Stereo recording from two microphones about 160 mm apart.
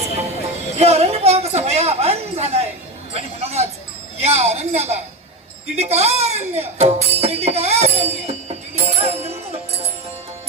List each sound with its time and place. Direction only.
0.8 s a woman's voice: 40° right (ahead or behind)
3.1 s a sound: 40° right (ahead or behind)
4.2 s a woman's voice: 40° right (ahead or behind)